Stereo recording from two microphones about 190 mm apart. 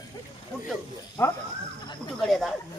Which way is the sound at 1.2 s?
15° left (ahead or behind).